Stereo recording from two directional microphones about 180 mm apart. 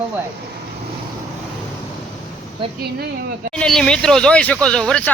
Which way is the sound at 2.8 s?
60° right (ahead or behind).